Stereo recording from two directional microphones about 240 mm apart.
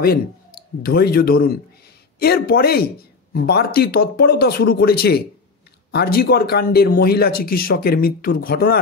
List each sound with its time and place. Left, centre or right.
0.8 s speech: left